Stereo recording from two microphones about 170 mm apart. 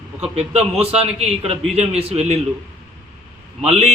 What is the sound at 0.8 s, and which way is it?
A man's voice, 35° right (ahead or behind).